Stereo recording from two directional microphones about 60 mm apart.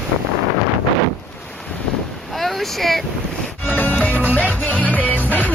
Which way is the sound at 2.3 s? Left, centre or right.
Centre.